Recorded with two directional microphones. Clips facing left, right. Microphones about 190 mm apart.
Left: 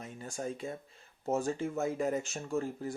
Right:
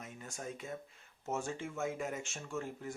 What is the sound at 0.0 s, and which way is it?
Speech, 30° left (ahead or behind).